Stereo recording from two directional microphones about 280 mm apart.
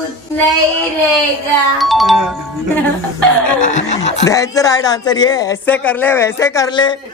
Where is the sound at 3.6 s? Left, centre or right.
Left.